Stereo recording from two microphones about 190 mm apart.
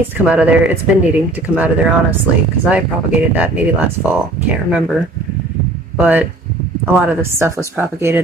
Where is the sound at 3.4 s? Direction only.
10° right (ahead or behind).